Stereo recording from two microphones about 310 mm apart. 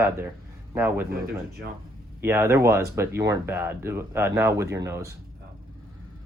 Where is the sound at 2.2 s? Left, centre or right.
Centre.